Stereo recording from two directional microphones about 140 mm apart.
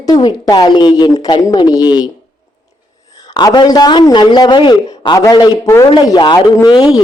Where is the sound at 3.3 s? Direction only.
30° left (ahead or behind).